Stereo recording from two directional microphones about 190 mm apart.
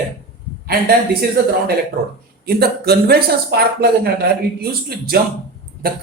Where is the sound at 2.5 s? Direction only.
55° right (ahead or behind).